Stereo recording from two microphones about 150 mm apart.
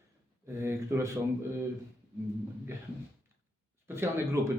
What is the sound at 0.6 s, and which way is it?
Speech, 15° right (ahead or behind).